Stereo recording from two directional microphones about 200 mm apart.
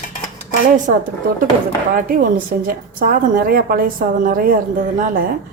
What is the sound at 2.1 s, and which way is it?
A woman's voice, 45° right (ahead or behind).